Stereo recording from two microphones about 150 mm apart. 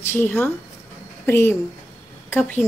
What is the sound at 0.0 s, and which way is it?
A woman's voice, 15° left (ahead or behind).